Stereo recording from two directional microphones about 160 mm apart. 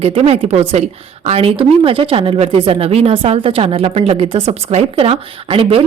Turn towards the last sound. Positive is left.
turn(degrees=-35)  # may be behind; listen again after turning